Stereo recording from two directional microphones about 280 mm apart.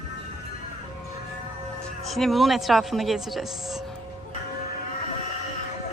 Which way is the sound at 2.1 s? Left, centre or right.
Centre.